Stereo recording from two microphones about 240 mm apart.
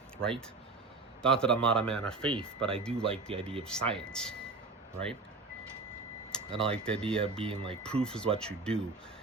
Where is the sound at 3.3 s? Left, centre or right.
Right.